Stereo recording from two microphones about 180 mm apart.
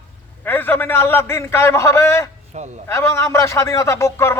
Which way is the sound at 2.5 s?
40° right (ahead or behind).